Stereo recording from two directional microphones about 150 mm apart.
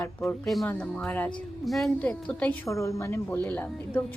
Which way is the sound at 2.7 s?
20° left (ahead or behind).